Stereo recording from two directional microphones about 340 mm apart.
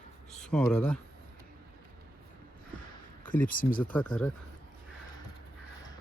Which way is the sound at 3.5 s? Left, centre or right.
Left.